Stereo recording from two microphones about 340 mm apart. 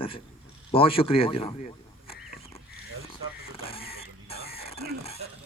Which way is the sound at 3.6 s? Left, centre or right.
Centre.